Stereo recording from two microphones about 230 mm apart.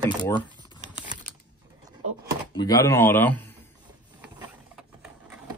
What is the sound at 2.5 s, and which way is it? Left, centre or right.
Speech, centre.